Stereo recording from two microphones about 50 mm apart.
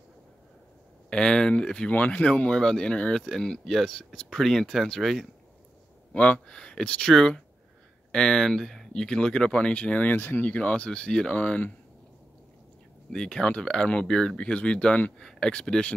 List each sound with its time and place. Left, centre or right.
1.1 s speech: centre
1.9 s speech: left; by 5.3 s centre
6.1 s speech: left
10.0 s speech: left
10.4 s speech: left
13.1 s speech: centre